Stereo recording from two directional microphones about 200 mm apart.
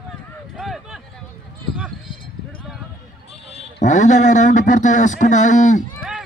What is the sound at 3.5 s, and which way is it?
A man's voice, 35° left (ahead or behind).